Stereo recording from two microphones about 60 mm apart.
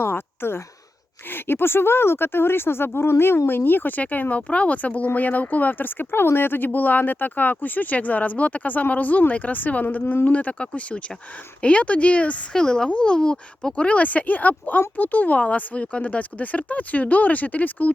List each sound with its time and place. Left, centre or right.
0.0 s speech: left